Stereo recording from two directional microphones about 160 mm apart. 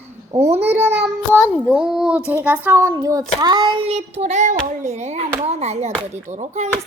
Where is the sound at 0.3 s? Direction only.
40° right (ahead or behind).